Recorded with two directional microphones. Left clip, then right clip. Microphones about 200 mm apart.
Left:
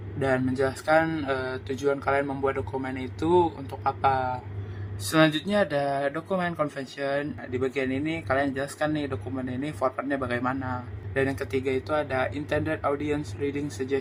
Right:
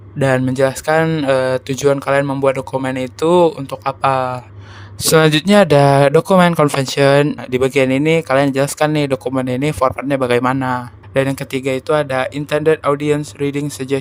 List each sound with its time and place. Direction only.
0.2 s speech: 55° right (ahead or behind)